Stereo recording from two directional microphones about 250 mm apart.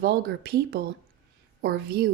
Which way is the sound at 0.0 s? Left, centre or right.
Right.